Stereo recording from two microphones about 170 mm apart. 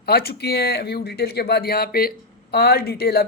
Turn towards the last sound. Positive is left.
turn(degrees=65)  # may be behind; listen again after turning